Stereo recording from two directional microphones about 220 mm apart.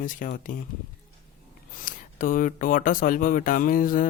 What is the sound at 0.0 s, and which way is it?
Speech, 35° left (ahead or behind).